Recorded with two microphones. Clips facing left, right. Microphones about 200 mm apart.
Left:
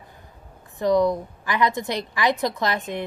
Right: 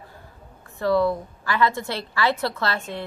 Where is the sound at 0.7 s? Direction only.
15° left (ahead or behind).